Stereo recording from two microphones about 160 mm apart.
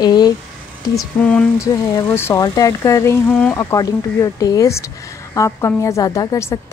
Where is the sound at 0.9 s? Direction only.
5° left (ahead or behind).